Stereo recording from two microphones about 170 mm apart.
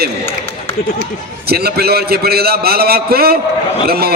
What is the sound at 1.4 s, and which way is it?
A man's voice, 65° right (ahead or behind).